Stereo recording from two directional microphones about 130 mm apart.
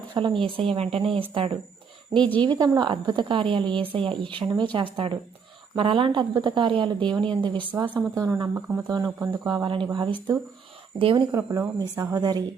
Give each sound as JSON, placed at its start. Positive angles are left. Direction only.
{"t": 0.1, "sound": "a woman's voice", "side_deg": -40}
{"t": 2.1, "sound": "a woman's voice", "side_deg": 10}
{"t": 2.4, "sound": "a woman's voice", "side_deg": -35}
{"t": 7.9, "sound": "a woman's voice", "side_deg": -25}
{"t": 11.3, "sound": "a woman's voice", "side_deg": -25}